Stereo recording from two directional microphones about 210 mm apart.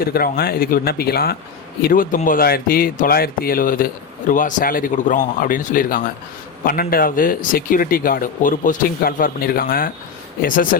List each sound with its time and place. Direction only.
0.0 s speech: 45° left (ahead or behind)